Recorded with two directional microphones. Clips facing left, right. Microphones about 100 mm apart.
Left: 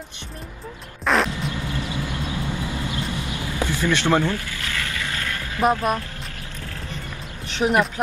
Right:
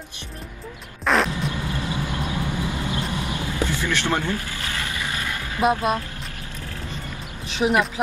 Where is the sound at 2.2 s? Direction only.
20° left (ahead or behind).